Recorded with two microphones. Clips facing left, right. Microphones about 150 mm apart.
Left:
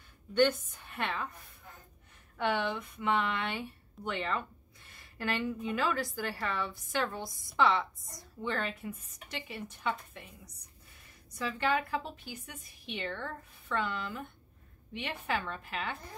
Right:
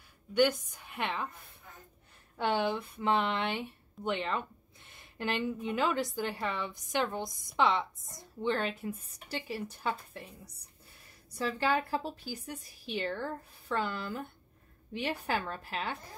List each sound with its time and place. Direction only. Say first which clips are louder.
0.3 s a woman's voice: even; 10° right (ahead or behind)
2.3 s a woman's voice: right 2 dB; 30° right (ahead or behind)